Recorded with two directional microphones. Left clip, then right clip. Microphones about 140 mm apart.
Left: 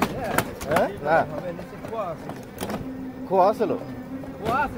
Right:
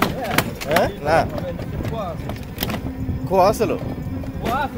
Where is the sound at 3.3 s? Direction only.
25° right (ahead or behind).